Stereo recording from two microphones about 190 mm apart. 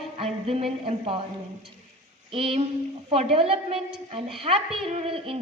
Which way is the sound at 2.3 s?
30° right (ahead or behind).